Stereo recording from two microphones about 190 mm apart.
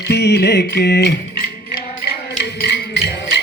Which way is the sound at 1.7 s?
55° left (ahead or behind).